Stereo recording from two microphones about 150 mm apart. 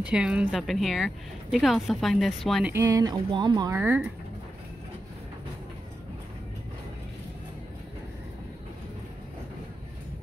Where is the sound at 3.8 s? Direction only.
10° right (ahead or behind).